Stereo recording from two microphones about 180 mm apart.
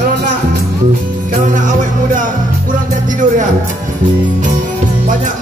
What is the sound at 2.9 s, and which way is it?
Music, 45° right (ahead or behind).